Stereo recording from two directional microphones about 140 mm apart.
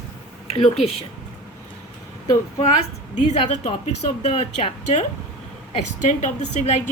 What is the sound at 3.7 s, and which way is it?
A woman's voice, 50° left (ahead or behind).